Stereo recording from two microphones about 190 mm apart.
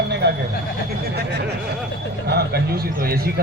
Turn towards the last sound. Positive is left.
turn(degrees=-55)  # may be behind; listen again after turning